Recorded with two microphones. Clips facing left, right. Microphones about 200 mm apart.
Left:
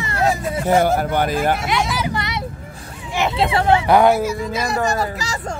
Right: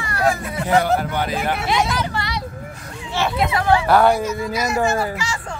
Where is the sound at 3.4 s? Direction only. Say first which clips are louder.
Left 2 dB; 30° left (ahead or behind).